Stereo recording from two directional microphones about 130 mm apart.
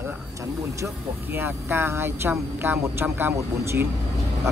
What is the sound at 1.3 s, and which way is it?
Speech, 15° right (ahead or behind).